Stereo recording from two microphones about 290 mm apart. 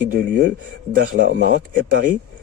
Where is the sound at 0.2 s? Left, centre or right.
Right.